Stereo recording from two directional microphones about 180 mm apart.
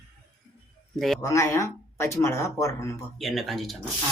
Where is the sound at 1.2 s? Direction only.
15° left (ahead or behind).